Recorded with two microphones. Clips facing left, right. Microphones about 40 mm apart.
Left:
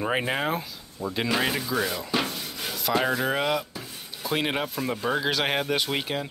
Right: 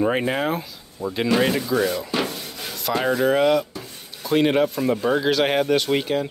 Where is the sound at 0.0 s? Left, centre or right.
Centre.